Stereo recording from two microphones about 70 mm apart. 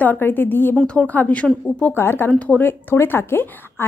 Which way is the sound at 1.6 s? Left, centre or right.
Left.